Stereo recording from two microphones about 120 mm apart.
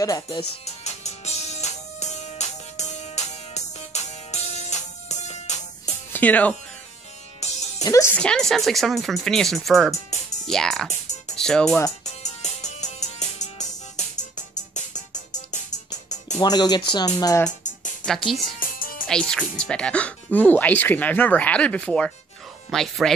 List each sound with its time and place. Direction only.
0.0 s speech: 30° left (ahead or behind)
0.7 s music: 70° left (ahead or behind)
6.1 s speech: 15° left (ahead or behind)
7.4 s music: 70° left (ahead or behind)
7.8 s speech: 25° left (ahead or behind)
8.2 s speech: 5° left (ahead or behind)
10.9 s music: 80° left
11.3 s speech: 5° left (ahead or behind)
12.0 s music: 75° left (ahead or behind)
16.3 s speech: 35° left (ahead or behind)
18.0 s speech: centre (ahead or behind)